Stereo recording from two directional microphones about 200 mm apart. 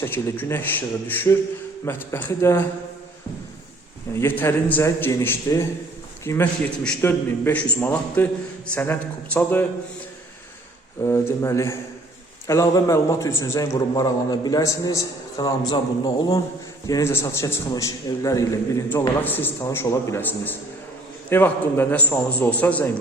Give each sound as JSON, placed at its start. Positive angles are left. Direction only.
{"t": 0.0, "sound": "a man's voice", "side_deg": 10}
{"t": 4.2, "sound": "a man's voice", "side_deg": 10}
{"t": 11.0, "sound": "a man's voice", "side_deg": 15}